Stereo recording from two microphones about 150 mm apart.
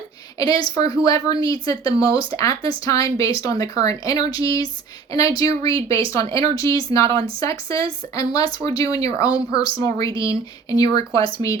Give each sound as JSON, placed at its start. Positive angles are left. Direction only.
{"t": 0.3, "sound": "speech", "side_deg": 25}
{"t": 11.2, "sound": "speech", "side_deg": -35}